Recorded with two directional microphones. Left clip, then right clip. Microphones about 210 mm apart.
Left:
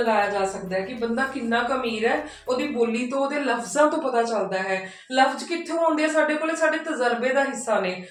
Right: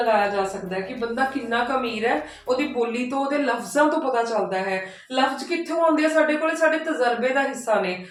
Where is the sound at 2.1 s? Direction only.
15° right (ahead or behind).